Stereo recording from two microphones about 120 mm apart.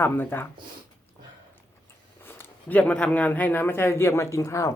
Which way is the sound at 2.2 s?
20° left (ahead or behind).